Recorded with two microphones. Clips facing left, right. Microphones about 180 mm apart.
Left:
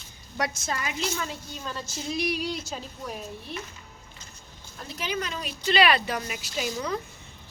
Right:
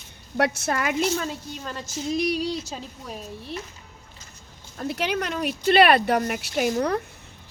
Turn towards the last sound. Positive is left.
turn(degrees=-60)  # may be behind; listen again after turning